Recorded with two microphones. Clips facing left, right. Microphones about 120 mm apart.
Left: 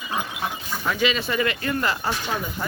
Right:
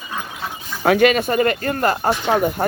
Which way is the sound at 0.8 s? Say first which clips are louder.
Right 10 dB; 65° right (ahead or behind).